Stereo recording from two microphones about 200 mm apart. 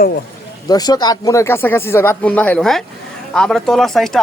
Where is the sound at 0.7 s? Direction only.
20° left (ahead or behind).